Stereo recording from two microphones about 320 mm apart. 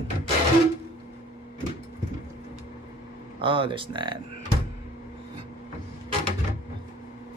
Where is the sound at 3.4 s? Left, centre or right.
Centre.